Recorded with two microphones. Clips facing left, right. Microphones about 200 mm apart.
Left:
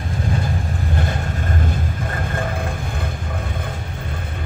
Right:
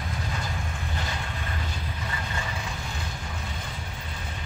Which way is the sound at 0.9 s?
50° left (ahead or behind).